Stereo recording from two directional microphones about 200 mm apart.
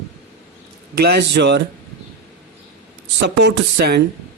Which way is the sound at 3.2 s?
55° right (ahead or behind).